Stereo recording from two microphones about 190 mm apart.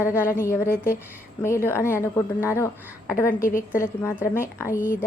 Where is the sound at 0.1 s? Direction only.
15° left (ahead or behind).